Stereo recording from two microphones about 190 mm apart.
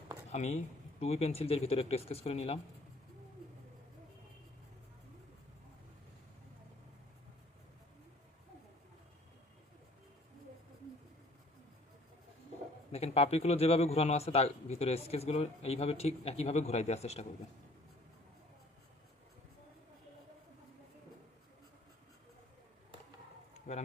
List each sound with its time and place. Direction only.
0.3 s a man's voice: 35° left (ahead or behind)
12.9 s a man's voice: 35° left (ahead or behind)
23.6 s a sound: 35° left (ahead or behind)